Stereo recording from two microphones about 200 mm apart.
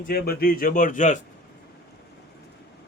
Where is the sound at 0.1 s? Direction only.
50° left (ahead or behind).